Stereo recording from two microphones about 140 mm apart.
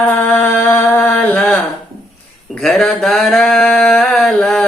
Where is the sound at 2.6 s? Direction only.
Centre (ahead or behind).